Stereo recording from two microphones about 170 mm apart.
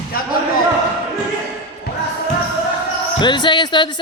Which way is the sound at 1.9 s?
75° left (ahead or behind).